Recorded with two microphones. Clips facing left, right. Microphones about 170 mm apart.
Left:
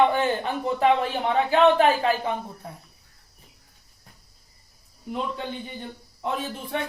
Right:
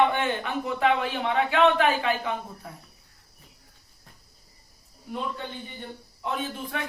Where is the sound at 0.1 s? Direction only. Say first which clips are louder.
Left 3 dB; 35° left (ahead or behind).